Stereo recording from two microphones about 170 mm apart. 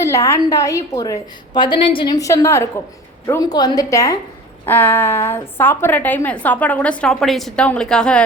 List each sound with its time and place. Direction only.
0.0 s a woman's voice: 15° left (ahead or behind)